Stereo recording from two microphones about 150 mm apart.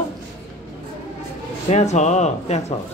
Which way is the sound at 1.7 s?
50° left (ahead or behind).